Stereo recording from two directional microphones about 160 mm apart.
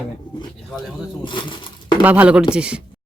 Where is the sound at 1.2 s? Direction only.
30° left (ahead or behind).